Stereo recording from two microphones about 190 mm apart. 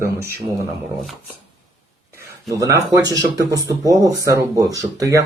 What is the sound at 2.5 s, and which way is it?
Speech, 15° right (ahead or behind).